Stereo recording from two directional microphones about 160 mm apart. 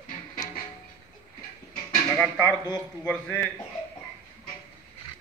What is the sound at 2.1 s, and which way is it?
A man's voice, 5° left (ahead or behind).